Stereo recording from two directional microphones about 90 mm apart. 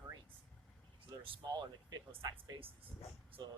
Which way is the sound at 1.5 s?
50° right (ahead or behind).